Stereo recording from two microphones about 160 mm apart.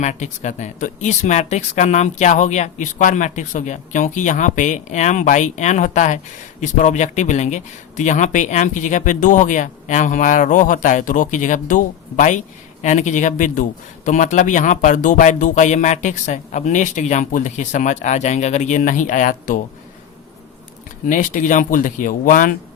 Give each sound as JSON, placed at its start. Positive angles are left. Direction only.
{"t": 0.0, "sound": "speech", "side_deg": 45}
{"t": 21.1, "sound": "speech", "side_deg": 50}